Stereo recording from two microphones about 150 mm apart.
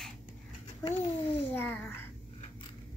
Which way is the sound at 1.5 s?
15° left (ahead or behind).